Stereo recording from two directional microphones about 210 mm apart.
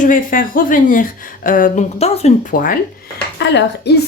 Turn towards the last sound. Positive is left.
turn(degrees=55)  # may be behind; listen again after turning